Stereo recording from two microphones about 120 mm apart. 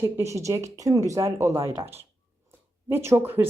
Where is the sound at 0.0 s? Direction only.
25° right (ahead or behind).